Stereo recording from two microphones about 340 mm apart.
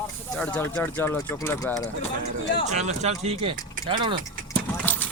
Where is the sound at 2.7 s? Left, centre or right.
Centre.